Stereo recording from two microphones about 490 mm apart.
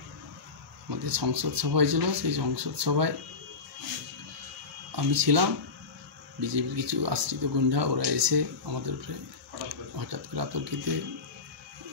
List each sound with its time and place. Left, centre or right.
0.8 s speech: right
4.9 s speech: right
10.0 s speech: right